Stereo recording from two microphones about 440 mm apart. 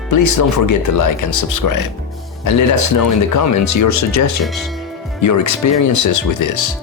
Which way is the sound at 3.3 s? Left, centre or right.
Left.